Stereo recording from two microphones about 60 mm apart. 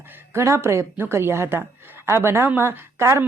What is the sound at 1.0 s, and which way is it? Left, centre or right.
A woman's voice, right.